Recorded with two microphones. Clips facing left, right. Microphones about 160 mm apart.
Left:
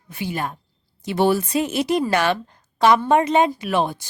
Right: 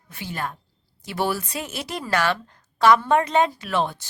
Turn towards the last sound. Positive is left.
turn(degrees=15)  # may be behind; listen again after turning